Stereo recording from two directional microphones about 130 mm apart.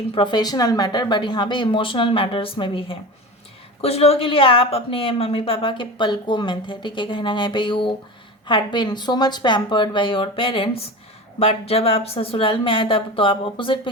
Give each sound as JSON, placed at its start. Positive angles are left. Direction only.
{"t": 0.1, "sound": "a woman's voice", "side_deg": 35}